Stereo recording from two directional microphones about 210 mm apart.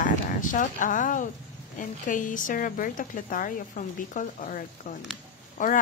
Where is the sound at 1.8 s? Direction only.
40° left (ahead or behind).